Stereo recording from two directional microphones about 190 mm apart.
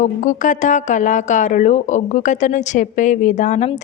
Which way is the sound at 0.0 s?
40° left (ahead or behind).